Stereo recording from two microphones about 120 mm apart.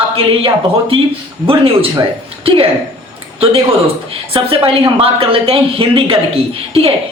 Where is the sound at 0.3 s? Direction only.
50° right (ahead or behind).